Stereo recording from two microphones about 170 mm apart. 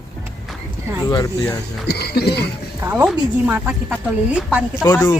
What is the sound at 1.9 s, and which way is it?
Speech, 75° left (ahead or behind).